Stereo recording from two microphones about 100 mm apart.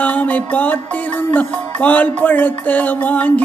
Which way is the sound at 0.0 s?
15° left (ahead or behind).